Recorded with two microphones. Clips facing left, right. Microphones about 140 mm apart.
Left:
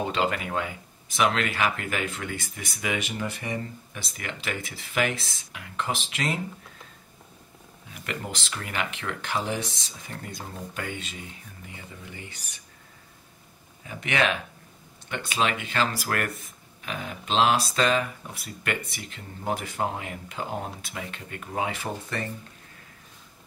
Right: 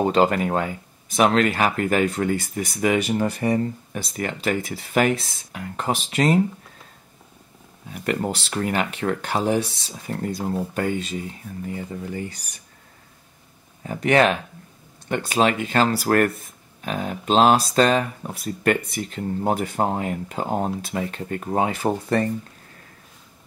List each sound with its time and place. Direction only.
0.0 s speech: 40° right (ahead or behind)
7.9 s speech: 45° right (ahead or behind)
13.8 s speech: 40° right (ahead or behind)